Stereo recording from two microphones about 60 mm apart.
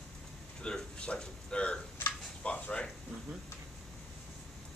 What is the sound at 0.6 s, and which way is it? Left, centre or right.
Speech, centre.